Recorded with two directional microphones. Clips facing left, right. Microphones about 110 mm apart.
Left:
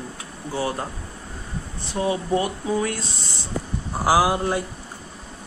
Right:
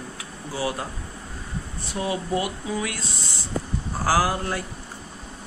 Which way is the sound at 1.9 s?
30° left (ahead or behind).